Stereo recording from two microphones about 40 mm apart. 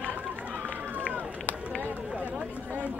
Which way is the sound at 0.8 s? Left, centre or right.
Right.